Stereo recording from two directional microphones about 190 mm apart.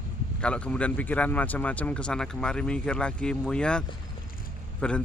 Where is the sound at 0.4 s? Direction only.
5° left (ahead or behind).